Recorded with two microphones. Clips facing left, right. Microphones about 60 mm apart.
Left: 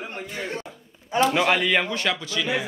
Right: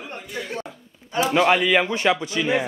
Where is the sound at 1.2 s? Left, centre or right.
Centre.